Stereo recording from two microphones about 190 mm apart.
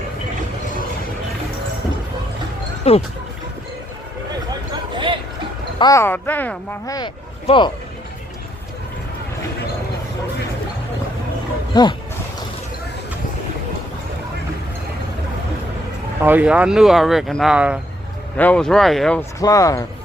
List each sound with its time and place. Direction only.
2.8 s speech: 35° left (ahead or behind)
4.9 s a sound: 25° right (ahead or behind)
5.8 s speech: 15° left (ahead or behind)
6.9 s speech: 25° left (ahead or behind)
11.7 s speech: 25° left (ahead or behind)
16.2 s speech: 10° right (ahead or behind)
18.3 s speech: 5° left (ahead or behind)
19.4 s speech: 20° left (ahead or behind)